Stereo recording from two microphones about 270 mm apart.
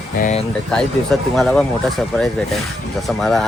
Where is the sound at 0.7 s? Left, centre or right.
Centre.